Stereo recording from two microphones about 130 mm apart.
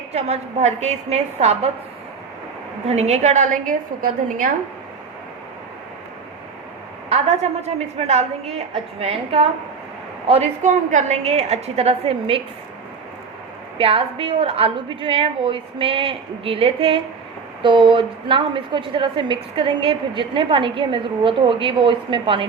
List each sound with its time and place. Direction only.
0.1 s a woman's voice: 55° right (ahead or behind)
2.8 s a woman's voice: 60° right (ahead or behind); by 4.5 s 90° right
7.1 s a woman's voice: 55° right (ahead or behind)
13.7 s a woman's voice: 45° right (ahead or behind)